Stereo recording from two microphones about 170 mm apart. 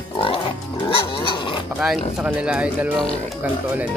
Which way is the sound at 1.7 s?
5° right (ahead or behind).